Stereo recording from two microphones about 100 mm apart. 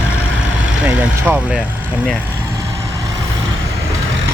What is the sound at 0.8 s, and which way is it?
Speech, 15° right (ahead or behind).